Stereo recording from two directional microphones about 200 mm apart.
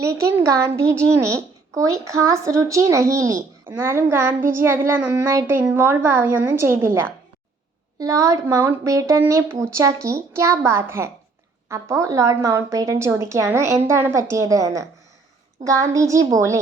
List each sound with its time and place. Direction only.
0.0 s a child's voice: 15° right (ahead or behind)